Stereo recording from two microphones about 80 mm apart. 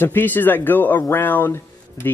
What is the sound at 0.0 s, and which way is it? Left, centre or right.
Speech, left.